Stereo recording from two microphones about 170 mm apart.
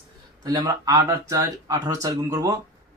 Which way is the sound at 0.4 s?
20° right (ahead or behind).